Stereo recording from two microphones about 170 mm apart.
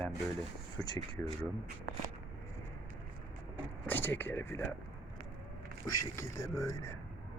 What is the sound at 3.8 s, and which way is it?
Speech, 10° left (ahead or behind).